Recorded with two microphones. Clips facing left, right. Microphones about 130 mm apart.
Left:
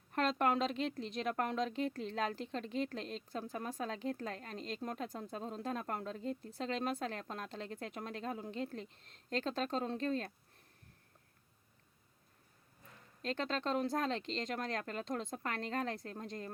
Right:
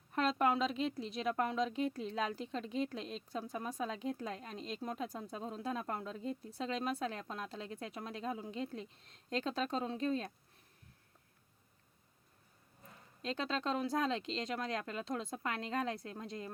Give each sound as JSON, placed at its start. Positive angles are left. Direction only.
{"t": 0.1, "sound": "a woman's voice", "side_deg": -5}
{"t": 13.3, "sound": "speech", "side_deg": -5}